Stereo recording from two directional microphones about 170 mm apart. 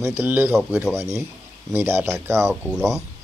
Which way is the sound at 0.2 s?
10° right (ahead or behind).